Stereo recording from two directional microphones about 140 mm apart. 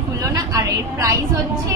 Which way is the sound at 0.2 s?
25° right (ahead or behind).